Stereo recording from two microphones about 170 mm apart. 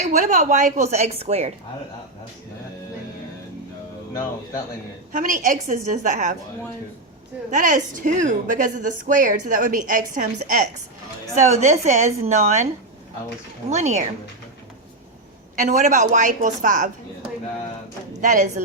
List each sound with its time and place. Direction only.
0.0 s speech: 45° right (ahead or behind)
5.1 s speech: 50° right (ahead or behind)
7.5 s speech: 50° right (ahead or behind)
11.3 s speech: 45° right (ahead or behind)
13.7 s speech: 40° right (ahead or behind)
15.6 s speech: 45° right (ahead or behind)
18.2 s speech: 45° right (ahead or behind)